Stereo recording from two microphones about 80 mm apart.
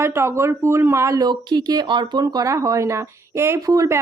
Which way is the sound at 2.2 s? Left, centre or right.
Right.